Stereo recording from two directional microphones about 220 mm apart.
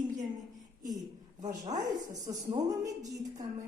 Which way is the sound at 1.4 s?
15° right (ahead or behind).